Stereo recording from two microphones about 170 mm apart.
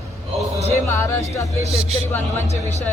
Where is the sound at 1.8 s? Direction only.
35° right (ahead or behind).